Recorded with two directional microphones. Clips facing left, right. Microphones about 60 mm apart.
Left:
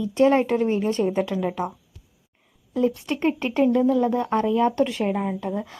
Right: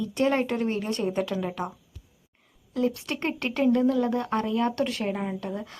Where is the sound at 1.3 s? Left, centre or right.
Left.